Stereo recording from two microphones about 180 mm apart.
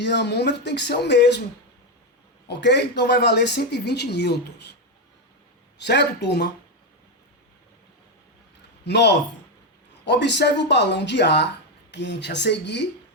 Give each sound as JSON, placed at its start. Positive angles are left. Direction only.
{"t": 0.0, "sound": "speech", "side_deg": 70}
{"t": 2.5, "sound": "speech", "side_deg": 70}
{"t": 5.8, "sound": "speech", "side_deg": 70}
{"t": 8.8, "sound": "speech", "side_deg": 70}